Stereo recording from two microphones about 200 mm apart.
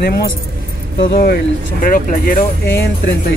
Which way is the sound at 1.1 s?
50° left (ahead or behind).